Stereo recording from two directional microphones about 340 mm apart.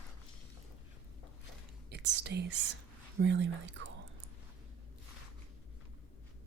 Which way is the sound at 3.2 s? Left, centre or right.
Right.